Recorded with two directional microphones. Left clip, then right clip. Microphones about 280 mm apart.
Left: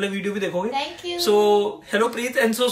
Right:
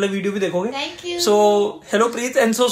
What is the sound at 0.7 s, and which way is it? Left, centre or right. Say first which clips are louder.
Speech: even; centre.